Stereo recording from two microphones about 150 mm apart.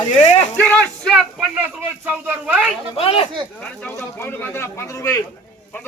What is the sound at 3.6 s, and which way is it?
Speech, 10° left (ahead or behind).